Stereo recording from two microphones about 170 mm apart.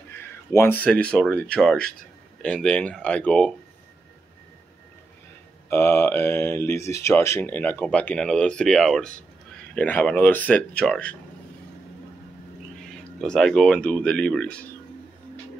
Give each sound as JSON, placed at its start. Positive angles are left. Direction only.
{"t": 0.1, "sound": "speech", "side_deg": 15}
{"t": 5.7, "sound": "speech", "side_deg": 15}
{"t": 12.8, "sound": "speech", "side_deg": 5}